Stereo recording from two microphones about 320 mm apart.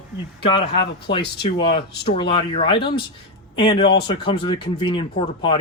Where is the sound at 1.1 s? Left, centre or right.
Centre.